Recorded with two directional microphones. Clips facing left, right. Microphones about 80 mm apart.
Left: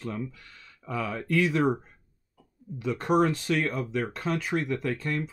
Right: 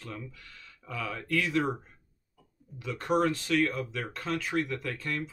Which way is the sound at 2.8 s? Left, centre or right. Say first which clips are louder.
Left 3 dB; left.